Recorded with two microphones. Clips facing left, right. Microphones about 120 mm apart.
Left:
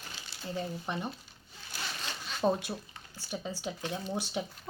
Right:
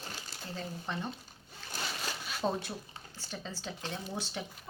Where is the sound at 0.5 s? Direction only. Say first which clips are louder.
Left 3 dB; 15° left (ahead or behind).